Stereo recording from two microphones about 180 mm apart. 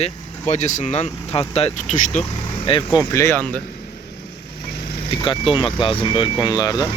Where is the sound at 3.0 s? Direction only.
15° left (ahead or behind).